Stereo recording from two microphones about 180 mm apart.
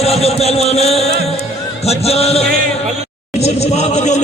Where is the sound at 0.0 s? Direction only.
35° left (ahead or behind).